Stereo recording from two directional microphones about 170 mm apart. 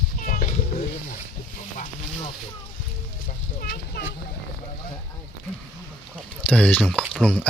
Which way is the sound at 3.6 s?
70° left (ahead or behind).